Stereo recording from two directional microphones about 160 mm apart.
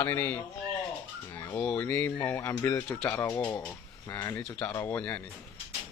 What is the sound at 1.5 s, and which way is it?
Speech, 10° left (ahead or behind).